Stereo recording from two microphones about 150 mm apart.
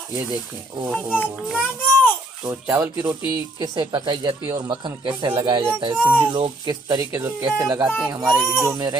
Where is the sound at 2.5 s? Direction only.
15° right (ahead or behind); by 5.6 s 35° right (ahead or behind).